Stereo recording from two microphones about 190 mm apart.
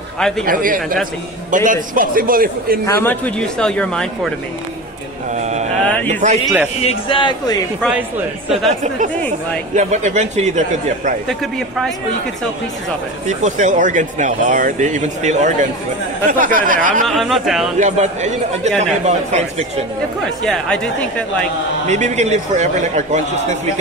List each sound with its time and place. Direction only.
0.5 s a man's voice: 45° right (ahead or behind)
2.9 s speech: 10° left (ahead or behind)
5.5 s a sound: 35° right (ahead or behind)
6.8 s a man's voice: 25° left (ahead or behind)
8.5 s speech: 40° right (ahead or behind)
13.3 s a man's voice: 40° right (ahead or behind)
17.0 s speech: centre (ahead or behind)
17.7 s speech: 40° right (ahead or behind)
20.4 s speech: 5° left (ahead or behind)
21.8 s speech: 40° right (ahead or behind)